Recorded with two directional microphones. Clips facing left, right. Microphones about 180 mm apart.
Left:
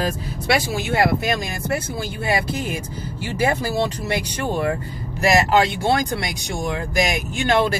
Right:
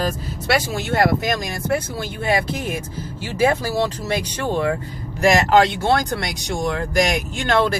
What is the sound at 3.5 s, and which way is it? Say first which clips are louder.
Speech: right 1 dB; 15° left (ahead or behind).